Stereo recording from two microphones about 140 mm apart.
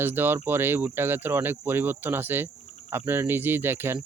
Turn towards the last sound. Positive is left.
turn(degrees=-15)  # may be behind; listen again after turning